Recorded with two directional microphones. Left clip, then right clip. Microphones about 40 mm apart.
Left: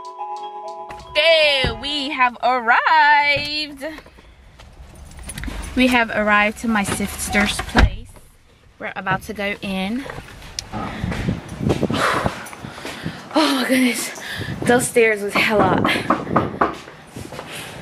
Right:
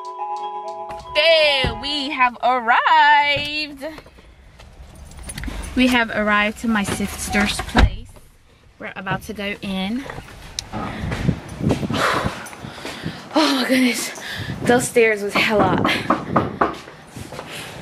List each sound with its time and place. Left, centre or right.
0.4 s music: centre
2.0 s a woman's voice: centre
3.8 s speech: left
5.3 s a sound: centre
5.8 s speech: centre
8.8 s a woman's voice: centre
9.2 s speech: left
9.5 s a woman's voice: centre
10.7 s a sound: centre
11.6 s dog: centre
12.6 s a sound: centre
13.6 s a woman's voice: centre
16.2 s a sound: centre